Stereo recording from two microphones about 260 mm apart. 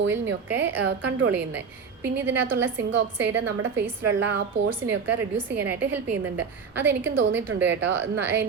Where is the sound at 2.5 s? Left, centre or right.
Centre.